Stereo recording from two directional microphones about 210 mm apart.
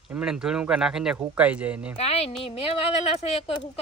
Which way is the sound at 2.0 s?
30° left (ahead or behind).